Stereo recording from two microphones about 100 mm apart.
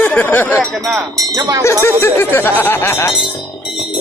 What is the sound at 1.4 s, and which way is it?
Speech, 35° right (ahead or behind).